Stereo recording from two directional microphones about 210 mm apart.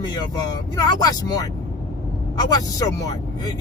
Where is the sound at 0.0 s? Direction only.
20° left (ahead or behind).